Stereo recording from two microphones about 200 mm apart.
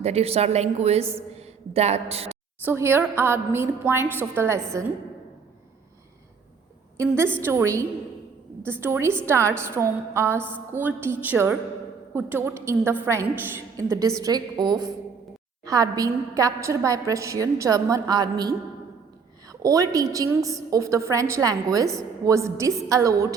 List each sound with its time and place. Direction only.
0.0 s a woman's voice: 30° right (ahead or behind)
2.6 s a woman's voice: 10° right (ahead or behind)
6.9 s a woman's voice: 15° right (ahead or behind)
19.6 s a woman's voice: 15° right (ahead or behind)